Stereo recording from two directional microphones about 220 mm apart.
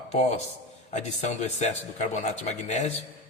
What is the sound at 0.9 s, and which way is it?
Speech, 30° left (ahead or behind).